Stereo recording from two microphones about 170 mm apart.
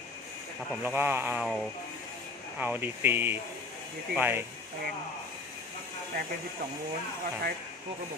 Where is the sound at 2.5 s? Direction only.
10° right (ahead or behind).